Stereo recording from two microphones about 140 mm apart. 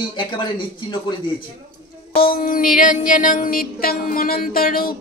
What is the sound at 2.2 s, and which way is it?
Music, 90° left.